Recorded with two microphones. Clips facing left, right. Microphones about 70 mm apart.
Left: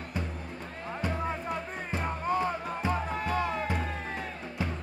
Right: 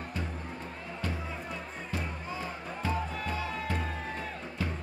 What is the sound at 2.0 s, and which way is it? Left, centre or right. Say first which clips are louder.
Music: left 9 dB; left.